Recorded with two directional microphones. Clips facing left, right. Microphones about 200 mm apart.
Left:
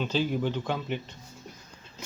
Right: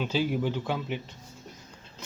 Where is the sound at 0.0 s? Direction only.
10° right (ahead or behind).